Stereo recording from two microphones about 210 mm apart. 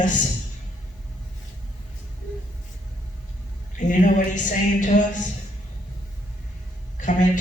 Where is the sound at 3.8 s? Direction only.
35° left (ahead or behind).